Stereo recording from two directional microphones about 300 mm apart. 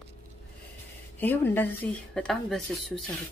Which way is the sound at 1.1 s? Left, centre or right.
Centre.